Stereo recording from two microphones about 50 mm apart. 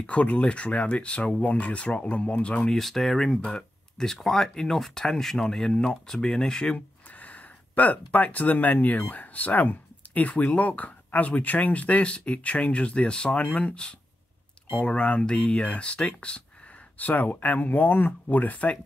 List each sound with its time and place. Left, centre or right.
0.0 s speech: left
2.7 s speech: centre
7.2 s speech: left
17.0 s speech: left